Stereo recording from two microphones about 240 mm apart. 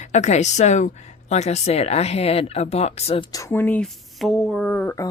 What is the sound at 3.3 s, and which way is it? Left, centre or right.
Speech, centre.